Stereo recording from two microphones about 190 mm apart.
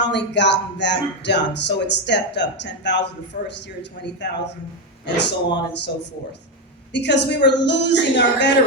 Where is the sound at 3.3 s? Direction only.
45° left (ahead or behind).